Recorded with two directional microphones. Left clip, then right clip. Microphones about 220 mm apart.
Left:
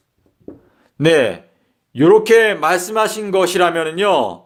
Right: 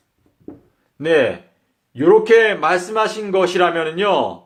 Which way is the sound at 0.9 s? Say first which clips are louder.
Left 2 dB; 45° left (ahead or behind).